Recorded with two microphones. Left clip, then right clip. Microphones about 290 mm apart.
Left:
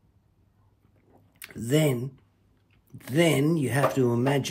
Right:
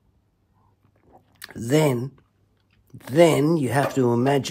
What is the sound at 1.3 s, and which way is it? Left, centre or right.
Speech, centre.